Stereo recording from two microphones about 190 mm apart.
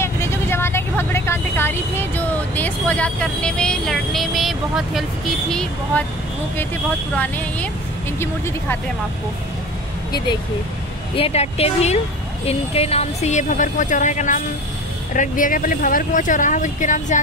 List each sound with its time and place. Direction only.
0.0 s vehicle: 15° left (ahead or behind)
5.5 s speech: 5° left (ahead or behind)
8.2 s speech: 10° left (ahead or behind)
11.1 s speech: 30° left (ahead or behind)